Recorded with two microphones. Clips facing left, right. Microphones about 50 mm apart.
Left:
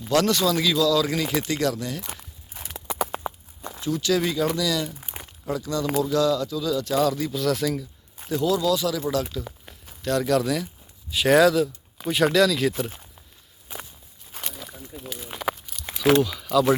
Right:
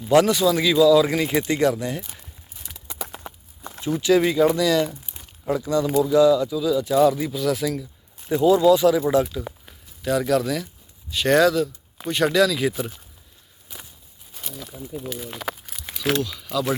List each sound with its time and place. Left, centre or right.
0.1 s speech: centre
2.6 s walk: left
3.8 s speech: right; by 7.9 s centre
8.3 s speech: right
10.0 s speech: centre
13.7 s walk: left
15.0 s speech: centre